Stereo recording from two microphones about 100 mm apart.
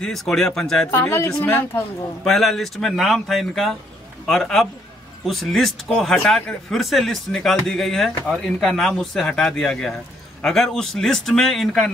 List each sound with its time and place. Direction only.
0.0 s speech: 5° left (ahead or behind)
1.4 s speech: 15° left (ahead or behind)
2.2 s speech: 5° left (ahead or behind)